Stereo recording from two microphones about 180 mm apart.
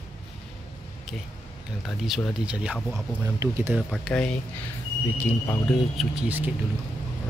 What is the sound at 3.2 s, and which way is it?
Speech, 15° right (ahead or behind).